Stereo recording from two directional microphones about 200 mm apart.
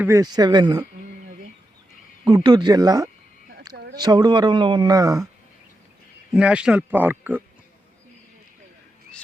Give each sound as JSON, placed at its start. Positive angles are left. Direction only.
{"t": 0.0, "sound": "speech", "side_deg": -15}
{"t": 2.2, "sound": "speech", "side_deg": -20}
{"t": 3.8, "sound": "a sound", "side_deg": -55}
{"t": 4.0, "sound": "speech", "side_deg": -20}
{"t": 6.3, "sound": "speech", "side_deg": -5}